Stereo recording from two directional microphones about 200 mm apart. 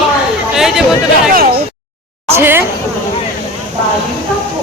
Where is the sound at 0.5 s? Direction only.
Centre (ahead or behind).